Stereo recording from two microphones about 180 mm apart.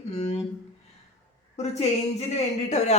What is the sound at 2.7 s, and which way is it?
Speech, 40° left (ahead or behind).